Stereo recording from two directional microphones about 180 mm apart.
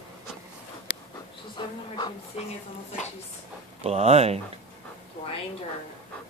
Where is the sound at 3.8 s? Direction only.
35° right (ahead or behind).